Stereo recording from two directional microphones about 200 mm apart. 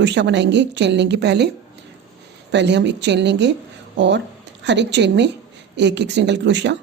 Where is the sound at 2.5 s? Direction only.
60° right (ahead or behind).